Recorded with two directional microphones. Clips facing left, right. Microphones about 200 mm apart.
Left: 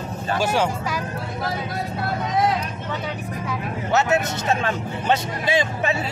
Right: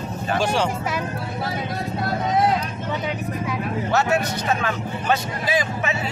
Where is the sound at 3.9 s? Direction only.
20° left (ahead or behind).